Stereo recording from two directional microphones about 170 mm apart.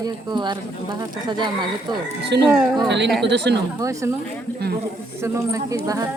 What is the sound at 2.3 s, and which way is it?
Speech, 85° right.